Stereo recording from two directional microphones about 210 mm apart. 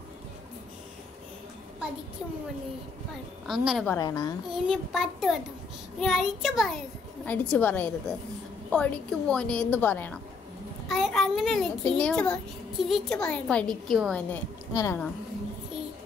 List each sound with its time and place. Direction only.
3.4 s a child's voice: centre (ahead or behind)
3.9 s a woman's voice: 15° left (ahead or behind)
4.5 s a child's voice: centre (ahead or behind); by 15.0 s 15° left (ahead or behind)